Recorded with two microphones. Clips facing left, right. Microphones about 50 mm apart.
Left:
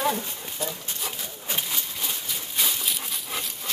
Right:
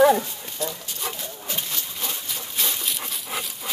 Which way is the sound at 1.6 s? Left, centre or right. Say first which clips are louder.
Even; centre.